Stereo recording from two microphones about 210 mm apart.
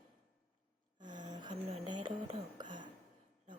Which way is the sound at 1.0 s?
20° right (ahead or behind).